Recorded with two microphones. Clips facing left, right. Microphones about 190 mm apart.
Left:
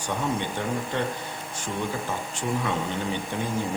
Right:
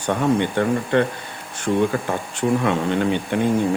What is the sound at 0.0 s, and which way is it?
Speech, 65° right (ahead or behind).